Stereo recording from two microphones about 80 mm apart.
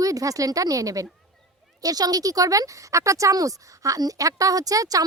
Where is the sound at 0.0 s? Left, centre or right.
Right.